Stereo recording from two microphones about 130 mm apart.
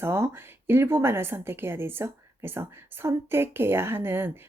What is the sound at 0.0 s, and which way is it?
Speech, 20° right (ahead or behind).